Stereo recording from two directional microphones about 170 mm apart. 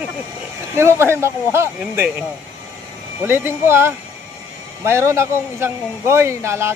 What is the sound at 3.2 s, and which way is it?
A man's voice, 15° right (ahead or behind).